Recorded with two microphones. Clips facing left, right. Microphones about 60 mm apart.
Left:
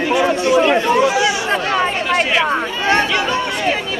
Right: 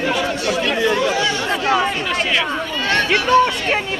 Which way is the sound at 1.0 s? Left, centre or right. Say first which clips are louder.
Left 4 dB; centre.